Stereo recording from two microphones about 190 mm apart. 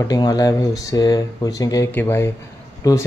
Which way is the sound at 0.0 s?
20° left (ahead or behind).